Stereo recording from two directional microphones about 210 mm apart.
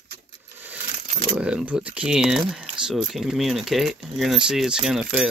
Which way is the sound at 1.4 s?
5° right (ahead or behind).